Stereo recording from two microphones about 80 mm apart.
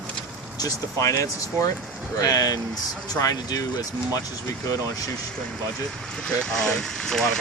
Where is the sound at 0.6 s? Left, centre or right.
Left.